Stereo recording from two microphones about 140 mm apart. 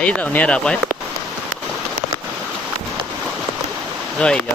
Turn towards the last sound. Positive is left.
turn(degrees=10)  # may be behind; listen again after turning